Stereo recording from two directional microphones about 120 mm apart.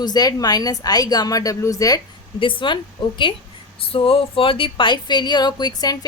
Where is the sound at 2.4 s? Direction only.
45° left (ahead or behind).